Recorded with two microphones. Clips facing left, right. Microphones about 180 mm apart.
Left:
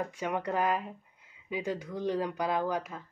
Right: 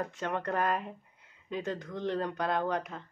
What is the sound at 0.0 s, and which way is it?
Speech, 10° left (ahead or behind).